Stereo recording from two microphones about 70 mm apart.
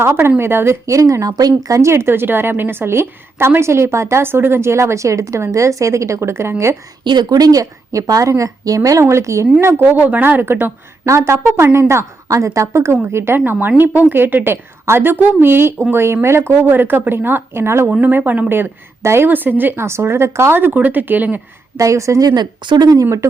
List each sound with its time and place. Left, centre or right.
0.0 s a woman's voice: right
0.9 s a woman's voice: right
1.9 s a woman's voice: right
7.0 s speech: right
9.8 s speech: right
11.0 s a woman's voice: right
18.0 s a woman's voice: right
21.8 s speech: right
22.4 s speech: right